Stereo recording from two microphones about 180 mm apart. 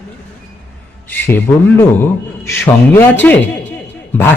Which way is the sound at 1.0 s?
10° left (ahead or behind).